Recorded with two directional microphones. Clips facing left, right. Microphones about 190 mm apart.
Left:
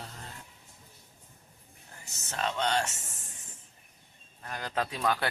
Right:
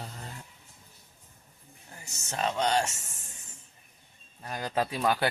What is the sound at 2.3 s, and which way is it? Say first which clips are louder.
Speech: right 2 dB; 10° right (ahead or behind).